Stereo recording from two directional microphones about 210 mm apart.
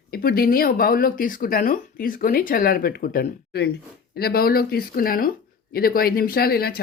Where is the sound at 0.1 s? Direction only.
45° left (ahead or behind).